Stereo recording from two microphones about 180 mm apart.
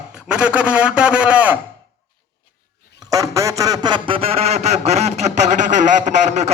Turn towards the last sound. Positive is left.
turn(degrees=-40)  # may be behind; listen again after turning